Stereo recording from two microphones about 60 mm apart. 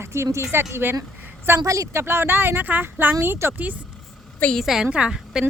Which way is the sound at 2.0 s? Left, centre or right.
Right.